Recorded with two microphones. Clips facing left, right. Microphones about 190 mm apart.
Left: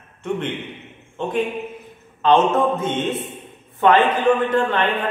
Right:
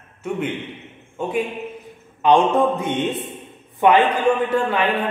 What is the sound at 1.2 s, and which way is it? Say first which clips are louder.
Mantra: left 1 dB; 10° right (ahead or behind).